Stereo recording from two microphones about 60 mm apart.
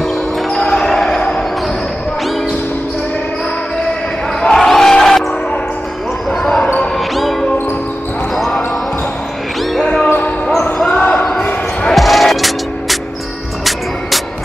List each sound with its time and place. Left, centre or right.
0.6 s basketball bounce: centre
4.4 s crowd: centre
6.3 s basketball bounce: centre
7.2 s basketball bounce: centre
10.0 s basketball bounce: left
10.9 s basketball bounce: centre
11.9 s music: centre